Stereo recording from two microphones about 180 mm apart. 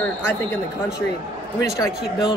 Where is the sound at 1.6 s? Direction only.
20° left (ahead or behind).